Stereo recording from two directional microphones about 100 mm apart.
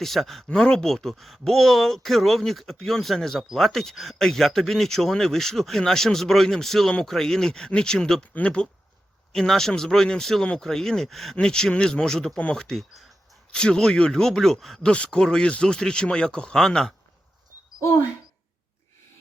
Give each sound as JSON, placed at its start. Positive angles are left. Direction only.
{"t": 0.0, "sound": "speech", "side_deg": 0}
{"t": 17.7, "sound": "speech", "side_deg": 30}